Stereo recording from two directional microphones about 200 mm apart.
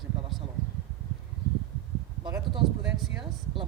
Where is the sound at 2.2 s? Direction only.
20° right (ahead or behind).